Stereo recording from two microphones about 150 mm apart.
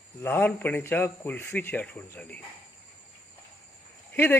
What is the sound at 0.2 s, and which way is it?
A man's voice, 10° left (ahead or behind).